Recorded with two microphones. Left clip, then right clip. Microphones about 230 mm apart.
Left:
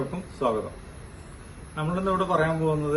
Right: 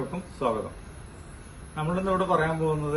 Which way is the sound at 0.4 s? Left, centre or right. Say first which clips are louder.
Left 2 dB; centre.